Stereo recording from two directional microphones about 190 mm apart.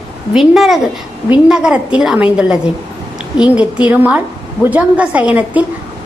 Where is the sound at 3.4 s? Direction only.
5° right (ahead or behind).